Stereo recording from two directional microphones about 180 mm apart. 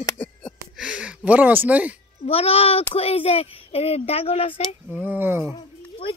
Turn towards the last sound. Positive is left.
turn(degrees=30)  # may be behind; listen again after turning